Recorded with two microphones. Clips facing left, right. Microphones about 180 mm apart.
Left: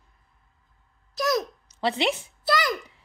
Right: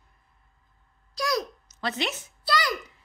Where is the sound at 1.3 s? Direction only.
25° left (ahead or behind).